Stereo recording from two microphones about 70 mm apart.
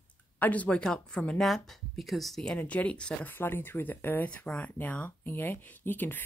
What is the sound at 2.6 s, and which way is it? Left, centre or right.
Speech, left.